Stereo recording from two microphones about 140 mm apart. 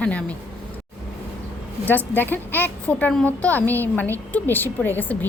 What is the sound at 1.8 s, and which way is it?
A woman's voice, 15° left (ahead or behind).